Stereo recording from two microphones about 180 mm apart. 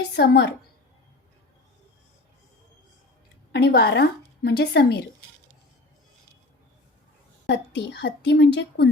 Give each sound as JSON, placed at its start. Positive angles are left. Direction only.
{"t": 0.1, "sound": "a woman's voice", "side_deg": 65}
{"t": 3.5, "sound": "speech", "side_deg": 65}
{"t": 7.4, "sound": "a woman's voice", "side_deg": 75}